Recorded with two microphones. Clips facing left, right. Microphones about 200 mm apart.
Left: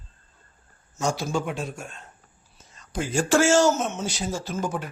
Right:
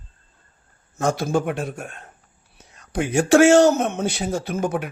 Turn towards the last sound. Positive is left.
turn(degrees=-60)  # may be behind; listen again after turning